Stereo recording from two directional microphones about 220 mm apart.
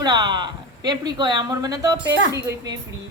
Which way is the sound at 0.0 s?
20° right (ahead or behind).